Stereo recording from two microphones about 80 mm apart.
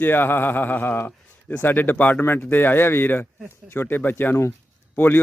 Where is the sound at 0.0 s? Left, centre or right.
Left.